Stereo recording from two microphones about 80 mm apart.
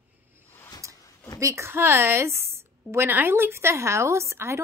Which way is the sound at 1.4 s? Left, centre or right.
Right.